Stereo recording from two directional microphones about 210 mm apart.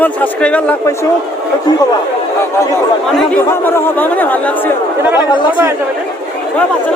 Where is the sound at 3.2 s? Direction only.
10° left (ahead or behind).